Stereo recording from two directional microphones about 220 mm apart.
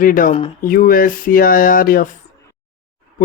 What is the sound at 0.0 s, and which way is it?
Speech, 40° left (ahead or behind).